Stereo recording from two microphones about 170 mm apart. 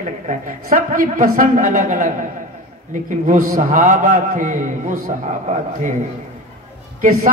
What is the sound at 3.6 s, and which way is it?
A man's voice, 50° right (ahead or behind).